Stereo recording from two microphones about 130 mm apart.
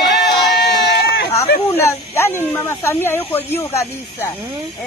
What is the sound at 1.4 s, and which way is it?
Speech, 20° left (ahead or behind).